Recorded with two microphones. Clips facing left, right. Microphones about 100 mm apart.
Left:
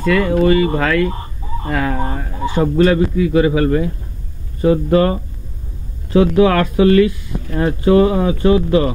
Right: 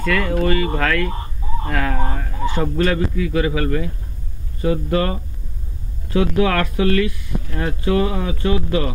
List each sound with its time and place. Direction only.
0.0 s a man's voice: 15° left (ahead or behind)
2.7 s a man's voice: 25° left (ahead or behind)